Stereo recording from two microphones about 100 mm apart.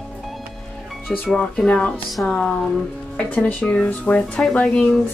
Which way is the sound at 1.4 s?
10° left (ahead or behind).